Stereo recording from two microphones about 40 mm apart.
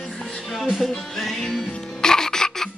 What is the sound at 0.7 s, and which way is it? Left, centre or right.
Music, centre.